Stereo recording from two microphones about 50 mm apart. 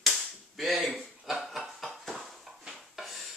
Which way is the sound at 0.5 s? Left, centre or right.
Centre.